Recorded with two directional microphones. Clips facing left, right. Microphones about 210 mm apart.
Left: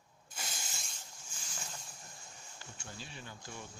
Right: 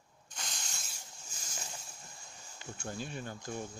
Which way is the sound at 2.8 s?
50° right (ahead or behind).